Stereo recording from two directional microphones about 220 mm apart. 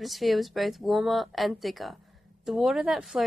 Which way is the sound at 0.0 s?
Centre (ahead or behind).